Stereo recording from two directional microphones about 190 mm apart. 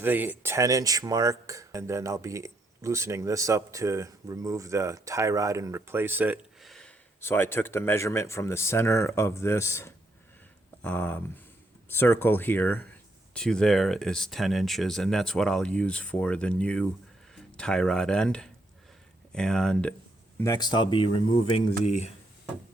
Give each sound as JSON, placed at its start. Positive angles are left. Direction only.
{"t": 0.0, "sound": "speech", "side_deg": -10}
{"t": 7.2, "sound": "speech", "side_deg": 10}
{"t": 20.4, "sound": "speech", "side_deg": 20}